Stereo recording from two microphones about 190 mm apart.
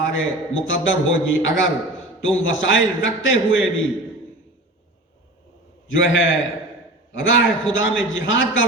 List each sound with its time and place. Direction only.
0.0 s a man's voice: 90° left
5.9 s a man's voice: 90° left